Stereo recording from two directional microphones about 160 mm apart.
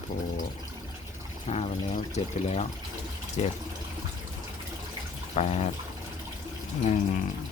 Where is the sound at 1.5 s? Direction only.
40° left (ahead or behind).